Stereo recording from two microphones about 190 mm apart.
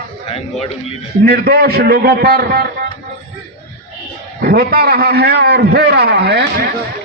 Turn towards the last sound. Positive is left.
turn(degrees=-60)  # may be behind; listen again after turning